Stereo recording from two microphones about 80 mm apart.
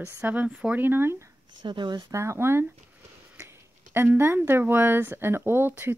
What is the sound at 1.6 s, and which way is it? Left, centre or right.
Speech, right.